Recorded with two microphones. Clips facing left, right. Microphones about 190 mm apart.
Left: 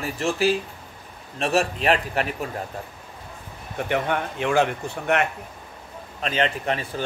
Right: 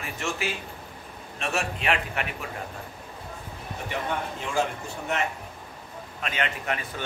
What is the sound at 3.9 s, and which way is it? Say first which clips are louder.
Speech: left 6 dB; 70° left (ahead or behind).